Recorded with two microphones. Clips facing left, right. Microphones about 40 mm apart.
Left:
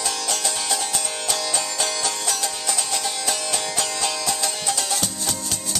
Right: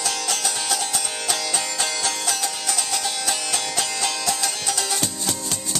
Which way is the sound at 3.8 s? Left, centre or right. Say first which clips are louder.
Even; right.